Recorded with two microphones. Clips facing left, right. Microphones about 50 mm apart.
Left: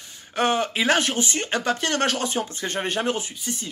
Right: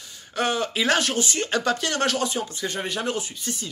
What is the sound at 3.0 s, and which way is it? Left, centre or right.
Speech, left.